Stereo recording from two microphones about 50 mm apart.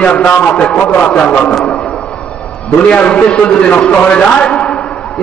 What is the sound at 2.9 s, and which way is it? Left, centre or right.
A man's voice, left.